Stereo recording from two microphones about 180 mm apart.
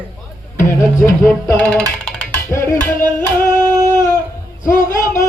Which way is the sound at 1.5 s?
5° left (ahead or behind).